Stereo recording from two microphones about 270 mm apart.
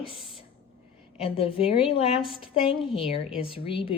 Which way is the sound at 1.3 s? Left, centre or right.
Left.